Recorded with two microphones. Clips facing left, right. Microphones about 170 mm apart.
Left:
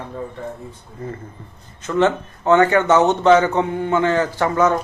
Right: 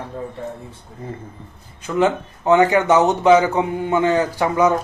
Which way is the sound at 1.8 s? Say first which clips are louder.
Left 1 dB; 10° right (ahead or behind).